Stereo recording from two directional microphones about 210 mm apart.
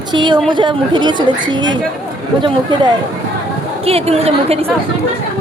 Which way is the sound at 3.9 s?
30° right (ahead or behind).